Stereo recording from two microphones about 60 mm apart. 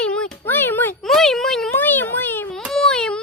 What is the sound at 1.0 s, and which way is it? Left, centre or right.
Speech, centre.